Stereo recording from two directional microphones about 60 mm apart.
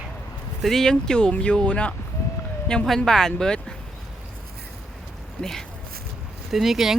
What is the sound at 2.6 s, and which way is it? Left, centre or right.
Speech, centre.